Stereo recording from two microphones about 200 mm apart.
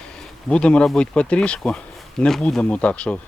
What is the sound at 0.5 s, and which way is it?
Speech, 5° left (ahead or behind).